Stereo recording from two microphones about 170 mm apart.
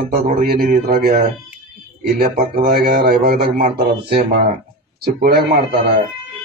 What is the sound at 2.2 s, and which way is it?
A man's voice, 60° right (ahead or behind).